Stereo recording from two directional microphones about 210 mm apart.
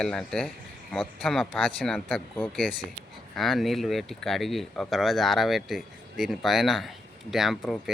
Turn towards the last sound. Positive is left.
turn(degrees=0)  # may be behind; listen again after turning